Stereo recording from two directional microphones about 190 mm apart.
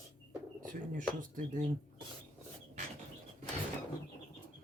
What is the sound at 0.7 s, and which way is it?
Speech, 45° right (ahead or behind).